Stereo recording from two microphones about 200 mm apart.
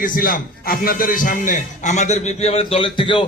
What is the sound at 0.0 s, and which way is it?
A man's voice, 45° left (ahead or behind).